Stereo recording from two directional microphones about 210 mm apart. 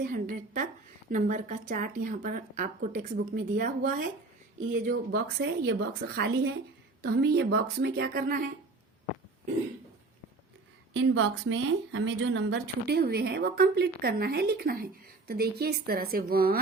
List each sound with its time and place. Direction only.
0.0 s speech: 40° right (ahead or behind)
10.9 s speech: 65° right (ahead or behind); by 16.6 s 45° right (ahead or behind)